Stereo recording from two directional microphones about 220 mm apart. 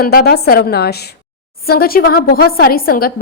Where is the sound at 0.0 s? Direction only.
45° left (ahead or behind).